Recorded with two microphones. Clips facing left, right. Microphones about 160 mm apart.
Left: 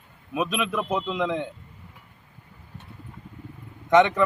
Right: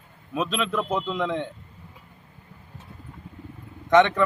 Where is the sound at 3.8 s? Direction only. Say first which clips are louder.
Even; 10° left (ahead or behind).